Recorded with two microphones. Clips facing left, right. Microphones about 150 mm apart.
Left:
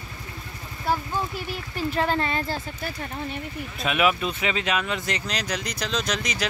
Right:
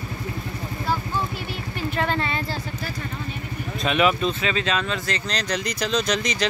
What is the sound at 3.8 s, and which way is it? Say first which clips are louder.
Speech: right 2 dB; 5° left (ahead or behind).